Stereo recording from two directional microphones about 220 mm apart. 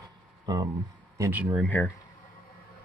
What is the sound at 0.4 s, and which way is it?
Speech, 15° right (ahead or behind).